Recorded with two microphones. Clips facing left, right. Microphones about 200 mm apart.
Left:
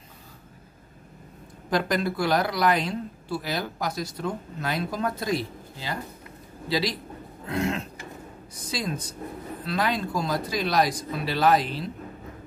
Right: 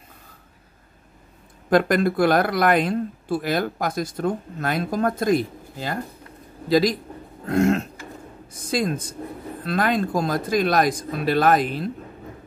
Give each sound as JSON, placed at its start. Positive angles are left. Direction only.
{"t": 1.7, "sound": "speech", "side_deg": -55}